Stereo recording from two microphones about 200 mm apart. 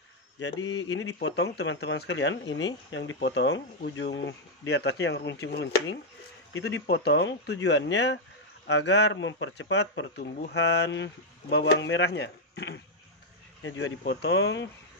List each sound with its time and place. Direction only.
0.4 s speech: 65° left (ahead or behind)